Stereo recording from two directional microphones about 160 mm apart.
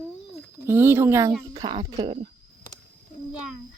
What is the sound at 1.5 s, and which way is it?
Speech, 30° right (ahead or behind).